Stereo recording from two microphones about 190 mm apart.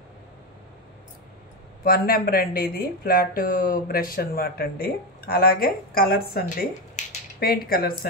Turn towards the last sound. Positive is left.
turn(degrees=55)  # may be behind; listen again after turning